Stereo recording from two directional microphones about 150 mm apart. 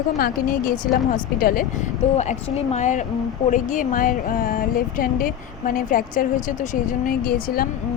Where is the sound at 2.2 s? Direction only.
45° left (ahead or behind).